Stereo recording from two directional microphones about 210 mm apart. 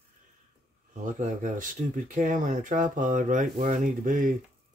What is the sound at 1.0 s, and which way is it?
Speech, 40° right (ahead or behind).